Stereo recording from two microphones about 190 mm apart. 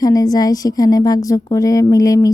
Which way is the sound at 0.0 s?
20° left (ahead or behind).